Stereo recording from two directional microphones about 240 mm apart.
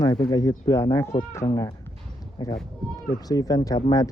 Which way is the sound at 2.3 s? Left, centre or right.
Centre.